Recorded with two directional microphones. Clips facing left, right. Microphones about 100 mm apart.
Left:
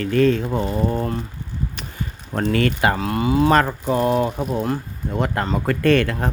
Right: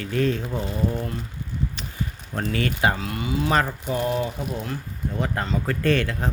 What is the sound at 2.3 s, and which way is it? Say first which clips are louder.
Speech: left 7 dB; 60° left (ahead or behind).